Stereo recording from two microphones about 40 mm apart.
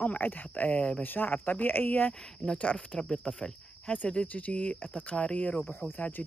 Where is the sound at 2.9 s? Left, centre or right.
Centre.